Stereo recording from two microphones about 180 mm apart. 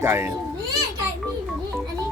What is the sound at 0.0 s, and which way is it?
Speech, 15° right (ahead or behind).